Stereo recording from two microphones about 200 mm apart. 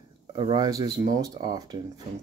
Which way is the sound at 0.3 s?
20° right (ahead or behind).